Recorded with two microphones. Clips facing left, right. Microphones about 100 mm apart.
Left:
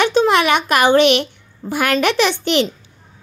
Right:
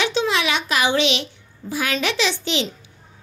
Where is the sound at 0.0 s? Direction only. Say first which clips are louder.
Left 7 dB; 50° left (ahead or behind).